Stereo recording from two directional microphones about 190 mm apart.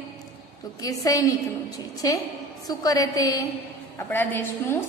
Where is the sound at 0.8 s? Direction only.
20° left (ahead or behind).